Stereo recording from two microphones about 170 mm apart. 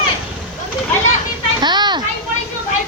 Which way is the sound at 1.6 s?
25° right (ahead or behind).